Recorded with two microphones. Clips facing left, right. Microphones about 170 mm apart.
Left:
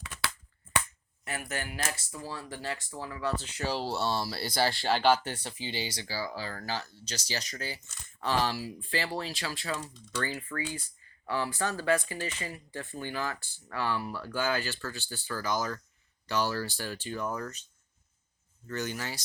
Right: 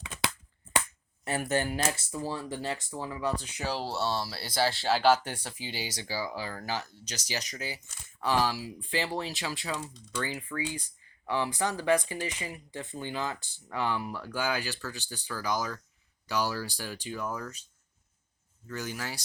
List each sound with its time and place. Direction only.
0.0 s finger snapping: 20° right (ahead or behind)
1.2 s speech: 30° right (ahead or behind); by 3.7 s 15° right (ahead or behind)
3.7 s speech: centre (ahead or behind)
18.7 s speech: 5° right (ahead or behind)